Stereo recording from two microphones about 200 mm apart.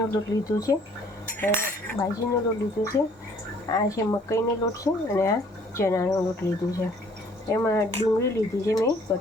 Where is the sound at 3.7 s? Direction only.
15° left (ahead or behind).